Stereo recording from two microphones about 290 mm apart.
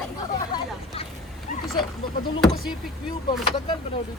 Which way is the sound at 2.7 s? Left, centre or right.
Centre.